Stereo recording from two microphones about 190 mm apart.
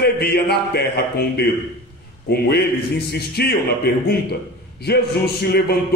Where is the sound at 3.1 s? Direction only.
55° left (ahead or behind).